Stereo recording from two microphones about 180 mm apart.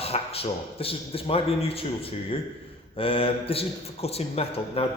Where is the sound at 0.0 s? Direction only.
35° left (ahead or behind).